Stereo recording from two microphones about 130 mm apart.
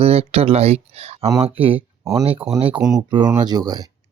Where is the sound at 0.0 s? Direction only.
50° right (ahead or behind).